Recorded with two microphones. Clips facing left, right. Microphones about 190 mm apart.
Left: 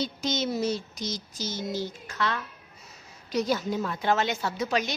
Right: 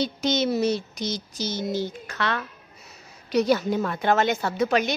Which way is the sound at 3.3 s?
65° right (ahead or behind).